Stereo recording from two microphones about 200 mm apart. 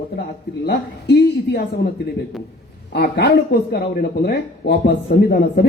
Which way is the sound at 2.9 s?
55° left (ahead or behind).